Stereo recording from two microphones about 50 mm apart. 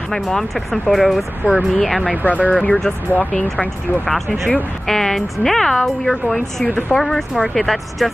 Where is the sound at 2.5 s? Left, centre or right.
Left.